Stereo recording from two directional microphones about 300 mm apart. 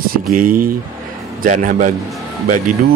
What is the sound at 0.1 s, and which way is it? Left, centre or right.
Speech, right.